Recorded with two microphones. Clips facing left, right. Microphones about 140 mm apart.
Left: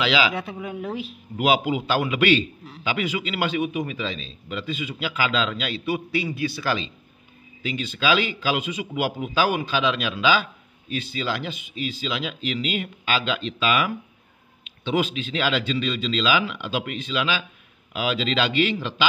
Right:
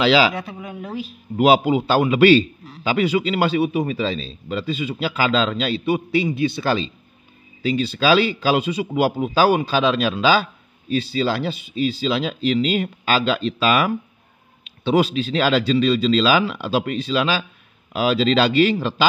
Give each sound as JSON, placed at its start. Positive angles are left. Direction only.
{"t": 0.0, "sound": "a man's voice", "side_deg": -35}
{"t": 1.4, "sound": "a man's voice", "side_deg": -35}